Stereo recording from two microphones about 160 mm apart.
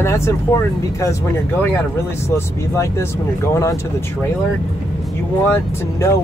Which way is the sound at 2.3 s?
15° left (ahead or behind).